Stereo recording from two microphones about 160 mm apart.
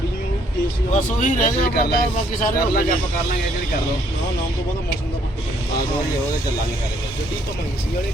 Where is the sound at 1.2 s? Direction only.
55° left (ahead or behind).